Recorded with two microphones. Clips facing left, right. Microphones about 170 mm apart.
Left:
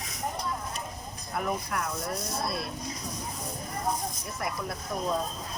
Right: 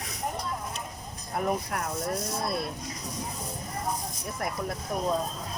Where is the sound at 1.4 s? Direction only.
40° right (ahead or behind).